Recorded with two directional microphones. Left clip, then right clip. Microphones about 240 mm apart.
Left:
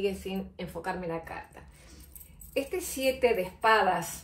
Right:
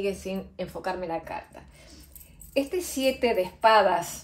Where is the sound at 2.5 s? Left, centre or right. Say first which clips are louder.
Right 4 dB; right.